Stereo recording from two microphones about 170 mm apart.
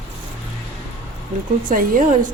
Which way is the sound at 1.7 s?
50° right (ahead or behind).